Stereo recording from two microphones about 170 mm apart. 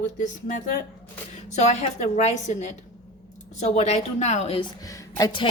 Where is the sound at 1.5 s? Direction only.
40° left (ahead or behind).